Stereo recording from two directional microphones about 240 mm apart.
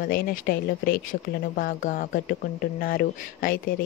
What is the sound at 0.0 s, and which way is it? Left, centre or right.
Speech, left.